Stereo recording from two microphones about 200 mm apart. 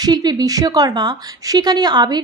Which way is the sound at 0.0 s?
20° right (ahead or behind).